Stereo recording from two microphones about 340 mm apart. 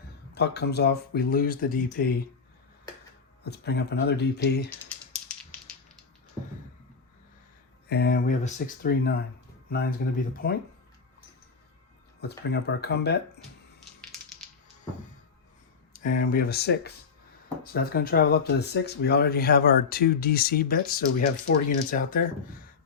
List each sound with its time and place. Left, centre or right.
0.3 s speech: left
3.4 s speech: left
7.9 s speech: left
12.5 s speech: left
15.9 s speech: left